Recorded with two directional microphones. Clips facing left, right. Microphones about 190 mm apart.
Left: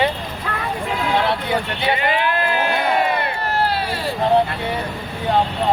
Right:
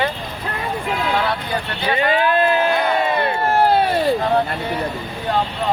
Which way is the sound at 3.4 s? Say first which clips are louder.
Right 8 dB; 50° right (ahead or behind).